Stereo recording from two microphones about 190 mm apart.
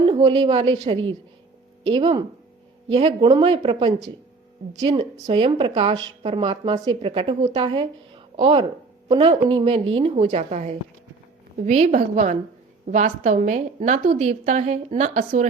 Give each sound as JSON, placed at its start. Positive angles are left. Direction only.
{"t": 0.0, "sound": "speech", "side_deg": -25}
{"t": 5.1, "sound": "a woman's voice", "side_deg": -30}